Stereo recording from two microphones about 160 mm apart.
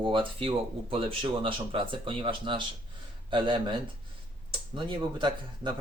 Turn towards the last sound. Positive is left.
turn(degrees=-30)  # may be behind; listen again after turning